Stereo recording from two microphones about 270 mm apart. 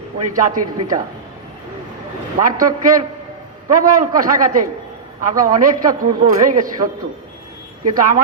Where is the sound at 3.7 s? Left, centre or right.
Right.